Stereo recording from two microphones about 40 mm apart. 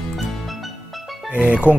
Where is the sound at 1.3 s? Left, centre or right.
Right.